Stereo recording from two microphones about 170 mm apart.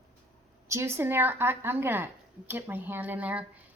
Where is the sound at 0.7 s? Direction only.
15° right (ahead or behind).